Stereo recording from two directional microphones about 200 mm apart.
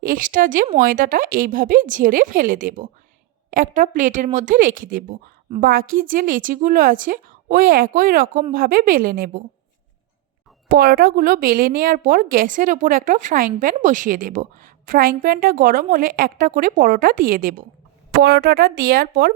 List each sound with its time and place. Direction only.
0.0 s a woman's voice: 45° right (ahead or behind)
10.7 s a woman's voice: 50° right (ahead or behind)